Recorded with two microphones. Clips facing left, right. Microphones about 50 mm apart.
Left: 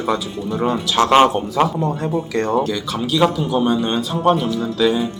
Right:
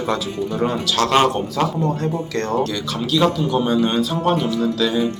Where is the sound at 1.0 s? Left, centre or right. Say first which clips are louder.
Left 4 dB; left.